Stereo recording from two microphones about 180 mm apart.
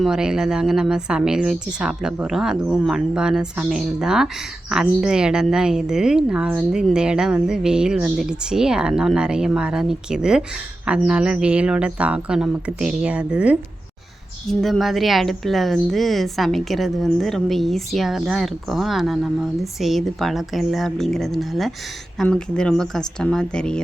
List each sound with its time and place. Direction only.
0.0 s a woman's voice: 5° right (ahead or behind)
14.6 s a woman's voice: centre (ahead or behind)